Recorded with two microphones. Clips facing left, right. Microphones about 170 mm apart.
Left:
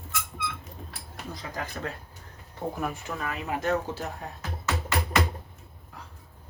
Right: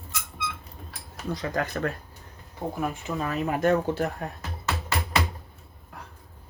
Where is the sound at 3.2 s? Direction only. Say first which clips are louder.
Right 5 dB; 45° right (ahead or behind).